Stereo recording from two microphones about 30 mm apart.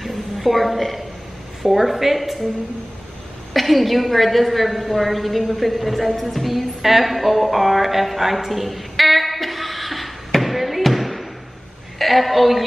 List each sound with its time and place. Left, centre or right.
0.0 s a sound: centre
1.6 s a woman's voice: centre
3.5 s a woman's voice: centre